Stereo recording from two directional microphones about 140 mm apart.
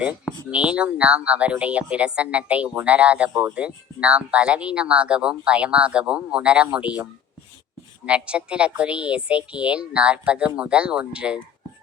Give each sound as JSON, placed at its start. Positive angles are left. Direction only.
{"t": 0.5, "sound": "speech", "side_deg": -10}